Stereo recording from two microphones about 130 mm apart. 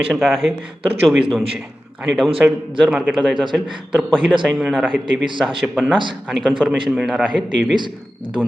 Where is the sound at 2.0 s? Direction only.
Centre (ahead or behind).